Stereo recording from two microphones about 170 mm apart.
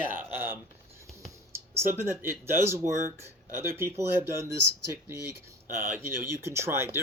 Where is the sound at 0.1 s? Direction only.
10° right (ahead or behind).